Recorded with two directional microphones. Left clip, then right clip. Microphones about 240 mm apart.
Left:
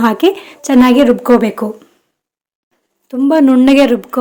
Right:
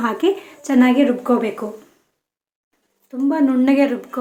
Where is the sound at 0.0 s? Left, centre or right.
Left.